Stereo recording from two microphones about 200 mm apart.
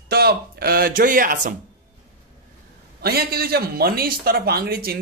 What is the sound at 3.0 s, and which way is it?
A man's voice, 50° right (ahead or behind).